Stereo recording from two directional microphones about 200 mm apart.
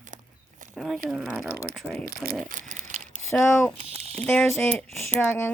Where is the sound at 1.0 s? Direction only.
Centre (ahead or behind).